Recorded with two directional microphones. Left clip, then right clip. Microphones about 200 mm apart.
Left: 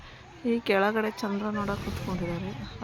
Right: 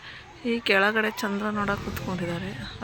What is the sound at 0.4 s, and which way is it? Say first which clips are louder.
Speech: right 3 dB; 10° left (ahead or behind).